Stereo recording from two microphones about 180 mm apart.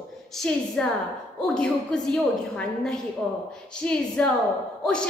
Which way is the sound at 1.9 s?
5° left (ahead or behind).